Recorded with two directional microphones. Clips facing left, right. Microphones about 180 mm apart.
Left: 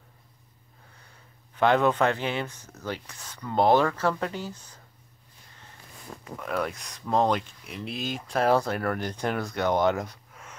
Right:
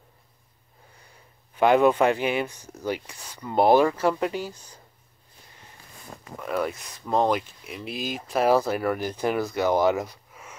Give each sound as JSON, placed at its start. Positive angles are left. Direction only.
{"t": 1.5, "sound": "speech", "side_deg": -10}
{"t": 6.4, "sound": "speech", "side_deg": -5}